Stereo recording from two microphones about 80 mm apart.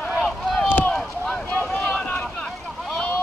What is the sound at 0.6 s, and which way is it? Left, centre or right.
Rowboat, left.